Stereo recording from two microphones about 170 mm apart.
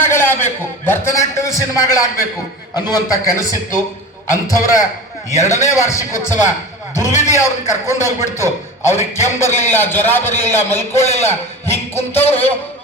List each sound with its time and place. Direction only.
0.0 s a man's voice: 15° left (ahead or behind)
7.3 s a man's voice: 15° left (ahead or behind)
12.2 s a man's voice: 35° left (ahead or behind)